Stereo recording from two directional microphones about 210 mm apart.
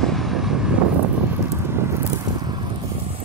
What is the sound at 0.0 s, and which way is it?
Vehicle, centre (ahead or behind).